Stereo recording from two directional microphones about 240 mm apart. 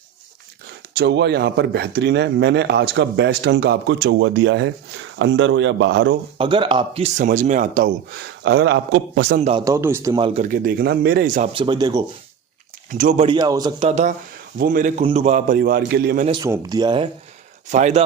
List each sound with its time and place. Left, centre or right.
0.9 s speech: right
6.4 s speech: right
8.4 s speech: right
9.4 s a man's voice: right
10.5 s speech: right
11.5 s speech: centre
12.9 s speech: right
16.2 s a man's voice: centre